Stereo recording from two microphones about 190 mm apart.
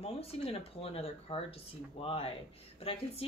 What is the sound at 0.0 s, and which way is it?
Speech, 30° left (ahead or behind).